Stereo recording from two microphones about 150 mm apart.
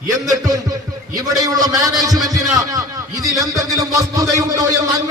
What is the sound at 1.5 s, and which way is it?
Speech, 25° right (ahead or behind).